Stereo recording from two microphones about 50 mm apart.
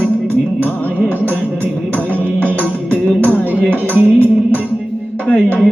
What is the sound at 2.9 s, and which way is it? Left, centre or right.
Music, left.